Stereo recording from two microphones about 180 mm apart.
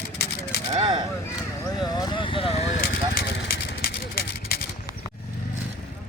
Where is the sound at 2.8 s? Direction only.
55° left (ahead or behind).